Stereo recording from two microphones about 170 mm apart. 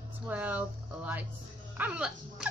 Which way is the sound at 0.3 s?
10° right (ahead or behind).